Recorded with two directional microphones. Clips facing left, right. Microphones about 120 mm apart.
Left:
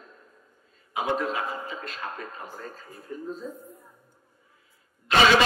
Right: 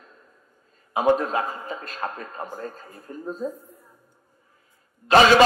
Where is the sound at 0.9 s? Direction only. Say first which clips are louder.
Right 7 dB; 45° right (ahead or behind).